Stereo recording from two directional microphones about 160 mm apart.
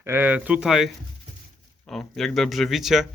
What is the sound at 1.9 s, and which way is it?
Speech, 5° left (ahead or behind).